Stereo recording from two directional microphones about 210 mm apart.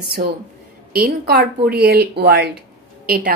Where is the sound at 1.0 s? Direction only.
50° right (ahead or behind).